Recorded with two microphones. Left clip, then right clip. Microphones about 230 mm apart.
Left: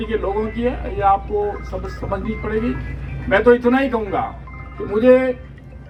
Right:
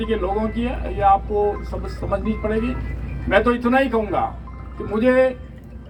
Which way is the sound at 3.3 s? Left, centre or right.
Right.